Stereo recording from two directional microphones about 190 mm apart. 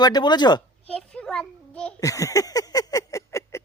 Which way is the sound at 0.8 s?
5° left (ahead or behind).